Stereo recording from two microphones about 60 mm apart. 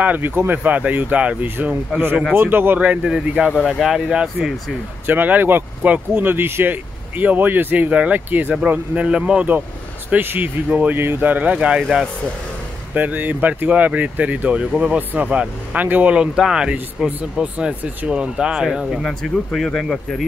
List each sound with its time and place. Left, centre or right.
0.0 s speech: right
0.7 s speech: right
2.3 s speech: right
2.8 s speech: centre
5.0 s speech: right
6.2 s speech: right
9.0 s speech: centre
12.9 s speech: right
14.6 s speech: centre
15.3 s speech: right; by 19.0 s centre
19.0 s speech: centre